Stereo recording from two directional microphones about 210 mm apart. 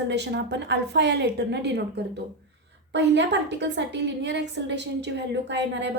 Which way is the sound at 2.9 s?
55° right (ahead or behind).